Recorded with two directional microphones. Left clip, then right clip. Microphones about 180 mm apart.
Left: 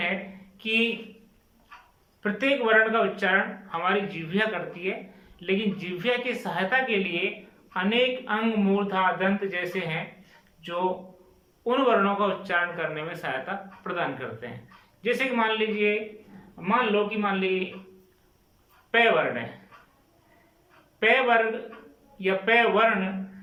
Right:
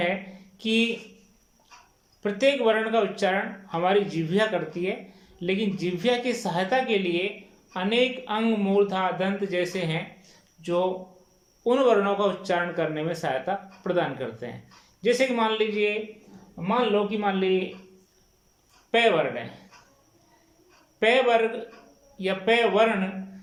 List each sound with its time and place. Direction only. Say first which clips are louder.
0.5 s speech: even; 25° right (ahead or behind)
2.2 s speech: right 3 dB; 20° right (ahead or behind); by 17.7 s 35° right (ahead or behind)
21.0 s speech: even; 20° right (ahead or behind)